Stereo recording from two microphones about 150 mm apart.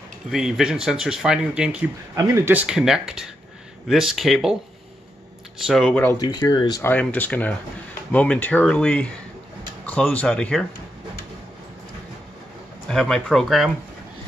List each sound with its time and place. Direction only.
0.3 s speech: 5° right (ahead or behind)
2.1 s speech: 20° right (ahead or behind); by 4.6 s centre (ahead or behind)
5.7 s speech: centre (ahead or behind)
6.1 s speech: 30° left (ahead or behind)
6.8 s speech: 10° left (ahead or behind)
12.8 s speech: 5° left (ahead or behind)